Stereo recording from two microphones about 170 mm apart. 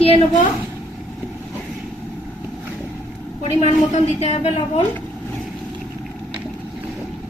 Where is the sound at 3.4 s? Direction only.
40° left (ahead or behind).